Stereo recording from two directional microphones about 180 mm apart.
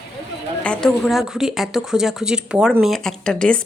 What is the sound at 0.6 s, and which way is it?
A woman's voice, 5° left (ahead or behind).